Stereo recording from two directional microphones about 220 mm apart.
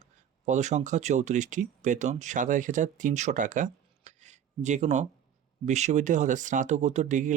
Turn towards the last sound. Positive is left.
turn(degrees=-35)  # may be behind; listen again after turning